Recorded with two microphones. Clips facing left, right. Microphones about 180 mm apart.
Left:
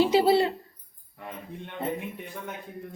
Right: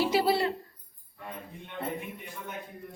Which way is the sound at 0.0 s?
25° left (ahead or behind).